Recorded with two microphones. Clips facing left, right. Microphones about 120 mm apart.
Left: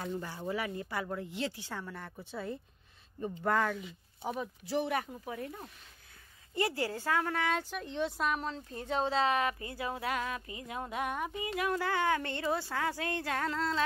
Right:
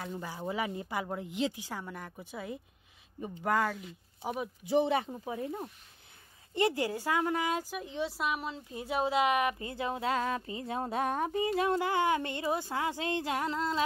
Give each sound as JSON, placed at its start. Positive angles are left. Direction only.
{"t": 0.1, "sound": "speech", "side_deg": -10}